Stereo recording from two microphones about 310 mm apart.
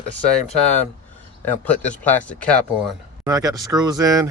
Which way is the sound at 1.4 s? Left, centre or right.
Centre.